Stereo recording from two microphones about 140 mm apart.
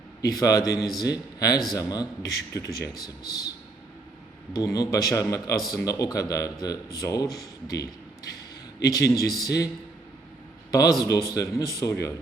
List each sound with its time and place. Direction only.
0.2 s a man's voice: 25° left (ahead or behind)
4.5 s a man's voice: 25° left (ahead or behind)
10.7 s a man's voice: 25° left (ahead or behind)